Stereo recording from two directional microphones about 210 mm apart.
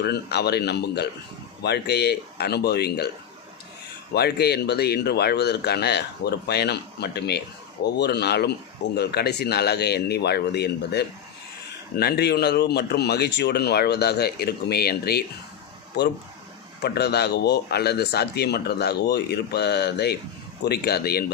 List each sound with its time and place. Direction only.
0.0 s speech: 50° left (ahead or behind)
4.1 s speech: 50° left (ahead or behind)
16.8 s speech: 50° left (ahead or behind)